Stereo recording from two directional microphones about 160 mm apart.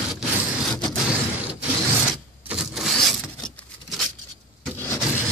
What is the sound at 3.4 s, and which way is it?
Patter, 5° left (ahead or behind).